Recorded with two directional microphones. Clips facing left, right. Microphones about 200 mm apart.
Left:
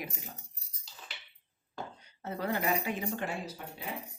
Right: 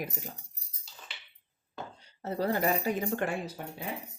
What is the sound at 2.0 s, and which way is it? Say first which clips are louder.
Speech: right 6 dB; 35° right (ahead or behind).